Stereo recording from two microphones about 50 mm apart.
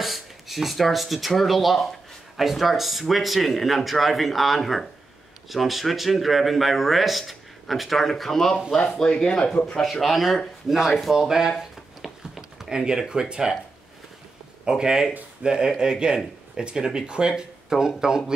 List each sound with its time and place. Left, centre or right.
0.0 s speech: centre
9.7 s speech: centre
11.1 s a sound: centre
13.1 s speech: centre
14.6 s speech: centre